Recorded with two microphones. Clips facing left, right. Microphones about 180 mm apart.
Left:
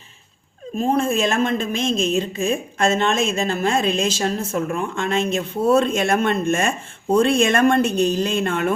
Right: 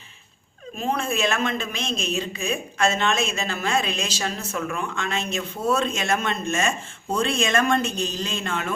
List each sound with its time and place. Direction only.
0.8 s speech: 45° left (ahead or behind)